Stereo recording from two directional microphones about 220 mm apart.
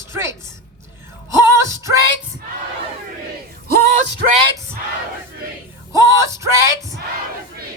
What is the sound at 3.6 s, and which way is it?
Music, 45° right (ahead or behind).